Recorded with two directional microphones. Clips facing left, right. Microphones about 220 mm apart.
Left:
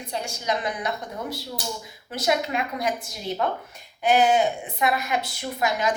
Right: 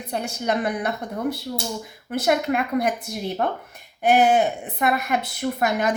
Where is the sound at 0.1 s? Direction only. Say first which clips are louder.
Right 4 dB; 60° right (ahead or behind).